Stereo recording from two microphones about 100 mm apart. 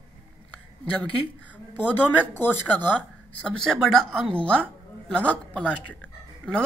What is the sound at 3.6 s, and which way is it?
Speech, 5° left (ahead or behind).